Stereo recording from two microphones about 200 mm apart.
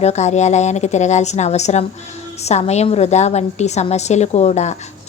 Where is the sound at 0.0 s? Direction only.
35° left (ahead or behind).